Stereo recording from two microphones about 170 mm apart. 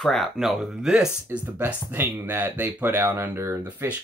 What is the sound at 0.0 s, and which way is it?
Speech, centre (ahead or behind).